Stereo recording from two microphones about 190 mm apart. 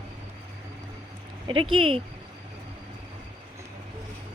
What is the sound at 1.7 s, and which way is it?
Speech, 30° right (ahead or behind).